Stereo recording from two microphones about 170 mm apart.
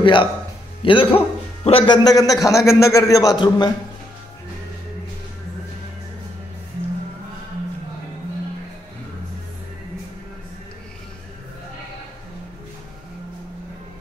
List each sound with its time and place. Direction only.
0.0 s a man's voice: 30° left (ahead or behind)
2.0 s a man's voice: 20° left (ahead or behind)